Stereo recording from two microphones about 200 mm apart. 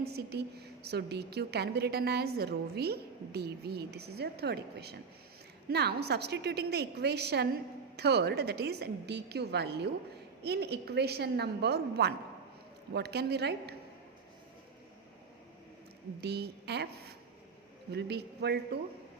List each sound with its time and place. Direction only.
0.0 s a woman's voice: 55° right (ahead or behind)
16.2 s a woman's voice: 55° right (ahead or behind)